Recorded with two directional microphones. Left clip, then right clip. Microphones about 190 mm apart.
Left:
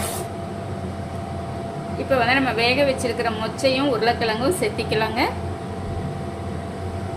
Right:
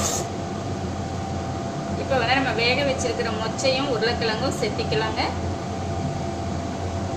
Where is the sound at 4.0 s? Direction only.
50° left (ahead or behind).